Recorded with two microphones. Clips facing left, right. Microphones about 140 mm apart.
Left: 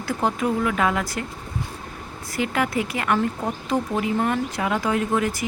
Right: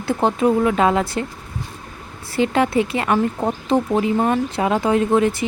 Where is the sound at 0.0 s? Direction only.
25° right (ahead or behind).